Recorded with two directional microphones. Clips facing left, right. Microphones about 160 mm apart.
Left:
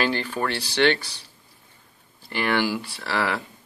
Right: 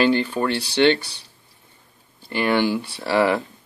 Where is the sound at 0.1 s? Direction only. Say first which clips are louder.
Right 6 dB; 20° right (ahead or behind).